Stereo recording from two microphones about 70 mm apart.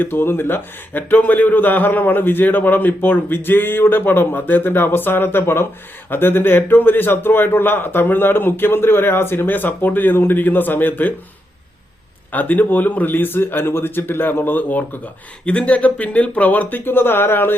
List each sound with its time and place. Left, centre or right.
0.0 s a man's voice: left
12.3 s a man's voice: left